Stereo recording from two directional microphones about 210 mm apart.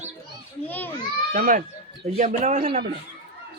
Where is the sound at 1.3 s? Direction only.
40° right (ahead or behind).